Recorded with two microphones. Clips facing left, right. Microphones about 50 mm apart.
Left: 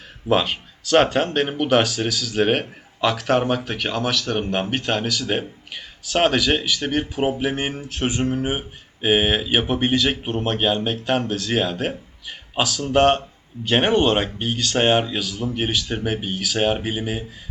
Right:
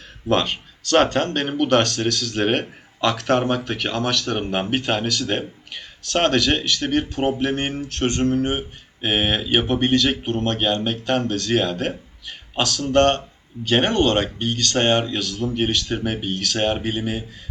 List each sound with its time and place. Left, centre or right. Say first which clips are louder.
0.3 s speech: left 1 dB; centre